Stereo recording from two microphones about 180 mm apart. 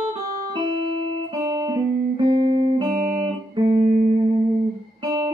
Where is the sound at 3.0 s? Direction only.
20° right (ahead or behind).